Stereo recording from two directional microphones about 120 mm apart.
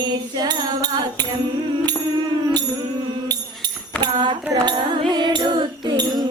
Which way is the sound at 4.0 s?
40° right (ahead or behind).